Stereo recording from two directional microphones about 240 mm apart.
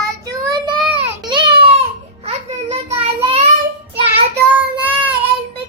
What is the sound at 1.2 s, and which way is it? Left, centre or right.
Baby cry, centre.